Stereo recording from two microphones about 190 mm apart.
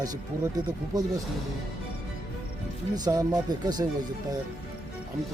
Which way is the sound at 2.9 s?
20° right (ahead or behind).